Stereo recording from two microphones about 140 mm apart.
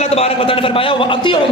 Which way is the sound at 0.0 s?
45° left (ahead or behind).